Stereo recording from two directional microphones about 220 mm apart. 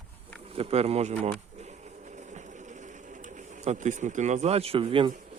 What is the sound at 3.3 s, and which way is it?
Speech, 35° right (ahead or behind).